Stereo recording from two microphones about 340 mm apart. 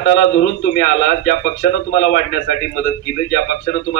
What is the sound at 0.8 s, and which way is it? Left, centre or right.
A man's voice, left.